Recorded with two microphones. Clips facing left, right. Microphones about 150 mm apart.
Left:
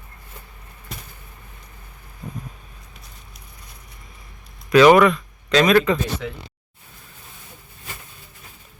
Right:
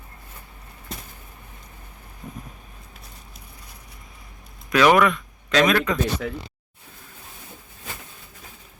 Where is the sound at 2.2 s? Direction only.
Centre (ahead or behind).